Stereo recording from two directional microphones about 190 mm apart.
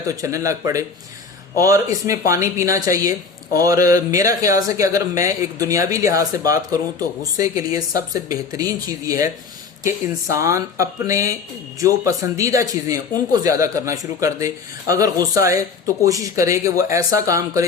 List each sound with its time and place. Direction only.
0.1 s speech: 15° right (ahead or behind)